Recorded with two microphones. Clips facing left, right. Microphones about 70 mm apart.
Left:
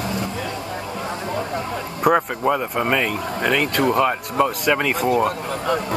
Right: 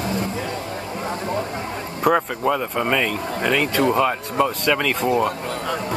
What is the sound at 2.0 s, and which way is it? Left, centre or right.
Speech, centre.